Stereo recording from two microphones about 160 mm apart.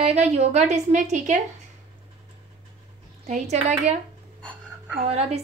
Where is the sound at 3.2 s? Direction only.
45° right (ahead or behind).